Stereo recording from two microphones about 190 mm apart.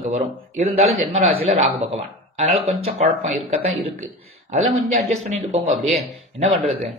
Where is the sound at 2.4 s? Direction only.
35° right (ahead or behind).